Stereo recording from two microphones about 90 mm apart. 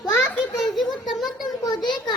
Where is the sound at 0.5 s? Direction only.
Centre (ahead or behind).